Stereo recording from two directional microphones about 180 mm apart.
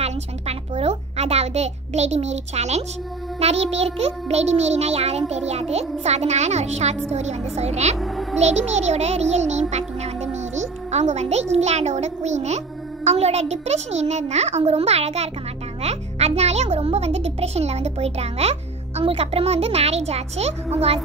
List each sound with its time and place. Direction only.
0.0 s a sound: 35° right (ahead or behind)
3.3 s a child's voice: 35° right (ahead or behind)
8.0 s music: centre (ahead or behind)
8.4 s a child's voice: 40° right (ahead or behind)